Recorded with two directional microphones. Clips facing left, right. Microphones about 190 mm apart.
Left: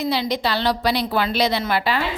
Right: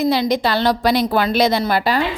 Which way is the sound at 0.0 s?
45° right (ahead or behind).